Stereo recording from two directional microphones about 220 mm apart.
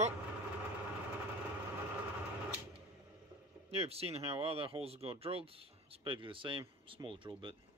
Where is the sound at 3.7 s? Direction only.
25° right (ahead or behind).